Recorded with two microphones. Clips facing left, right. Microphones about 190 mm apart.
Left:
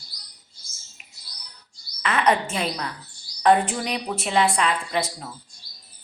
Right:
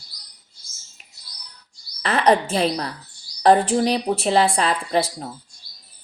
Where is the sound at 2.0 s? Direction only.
35° right (ahead or behind).